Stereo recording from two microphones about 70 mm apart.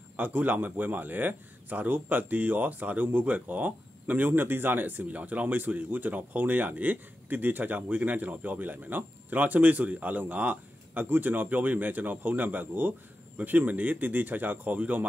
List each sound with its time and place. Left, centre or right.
0.2 s speech: right